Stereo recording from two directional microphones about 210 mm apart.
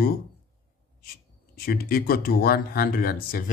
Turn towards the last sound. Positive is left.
turn(degrees=45)  # may be behind; listen again after turning